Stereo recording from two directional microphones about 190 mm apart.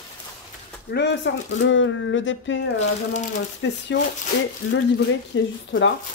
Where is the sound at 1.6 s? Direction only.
80° left.